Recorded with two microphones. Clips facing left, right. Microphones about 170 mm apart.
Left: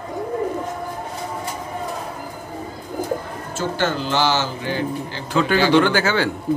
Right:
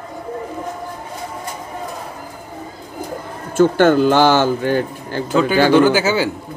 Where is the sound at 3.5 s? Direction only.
55° right (ahead or behind).